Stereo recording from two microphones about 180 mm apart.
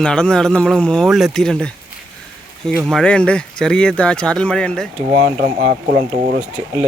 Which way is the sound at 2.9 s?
5° left (ahead or behind).